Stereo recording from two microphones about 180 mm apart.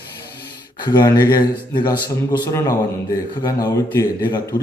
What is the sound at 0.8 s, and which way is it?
A man's voice, 25° left (ahead or behind).